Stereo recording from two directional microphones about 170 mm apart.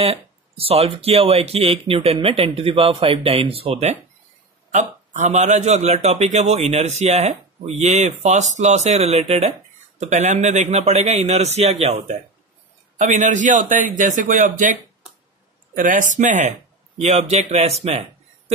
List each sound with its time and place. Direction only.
0.0 s a man's voice: 35° right (ahead or behind)
4.7 s a man's voice: 45° right (ahead or behind)